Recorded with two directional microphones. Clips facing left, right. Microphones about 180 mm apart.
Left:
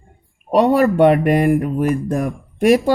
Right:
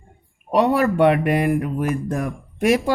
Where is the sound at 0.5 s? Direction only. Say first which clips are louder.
Left 4 dB; 35° left (ahead or behind).